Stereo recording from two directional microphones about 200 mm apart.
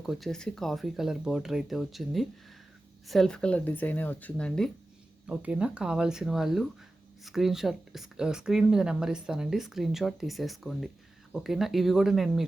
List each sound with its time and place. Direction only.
0.0 s speech: centre (ahead or behind)
5.3 s speech: 5° right (ahead or behind)